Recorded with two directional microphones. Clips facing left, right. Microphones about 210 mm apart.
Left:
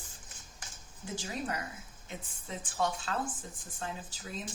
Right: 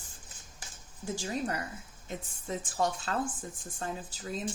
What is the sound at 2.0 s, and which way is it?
A woman's voice, 45° right (ahead or behind).